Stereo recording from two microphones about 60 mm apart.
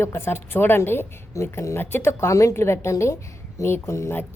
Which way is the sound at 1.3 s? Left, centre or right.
Left.